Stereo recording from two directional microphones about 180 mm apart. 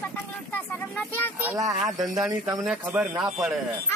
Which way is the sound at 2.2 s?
20° right (ahead or behind).